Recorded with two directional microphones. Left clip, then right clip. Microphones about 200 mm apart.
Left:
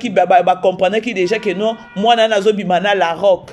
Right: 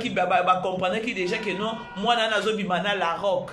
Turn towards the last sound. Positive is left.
turn(degrees=35)  # may be behind; listen again after turning